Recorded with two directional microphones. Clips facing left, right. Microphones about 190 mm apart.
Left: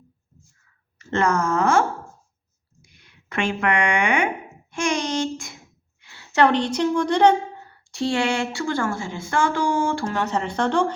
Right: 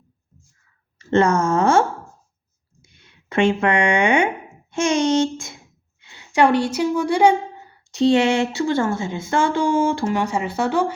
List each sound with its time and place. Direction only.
0.9 s speech: 25° right (ahead or behind)
2.9 s a woman's voice: 25° right (ahead or behind); by 7.3 s 10° right (ahead or behind)
7.9 s speech: 20° right (ahead or behind)